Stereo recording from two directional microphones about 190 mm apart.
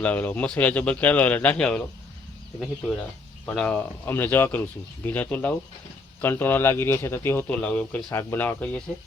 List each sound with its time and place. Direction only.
0.0 s a man's voice: 10° left (ahead or behind)
3.4 s a man's voice: 5° left (ahead or behind)